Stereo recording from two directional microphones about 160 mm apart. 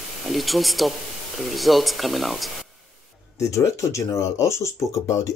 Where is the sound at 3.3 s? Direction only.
20° left (ahead or behind).